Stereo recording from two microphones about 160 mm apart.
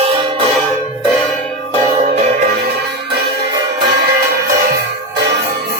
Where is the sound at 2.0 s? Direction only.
50° right (ahead or behind).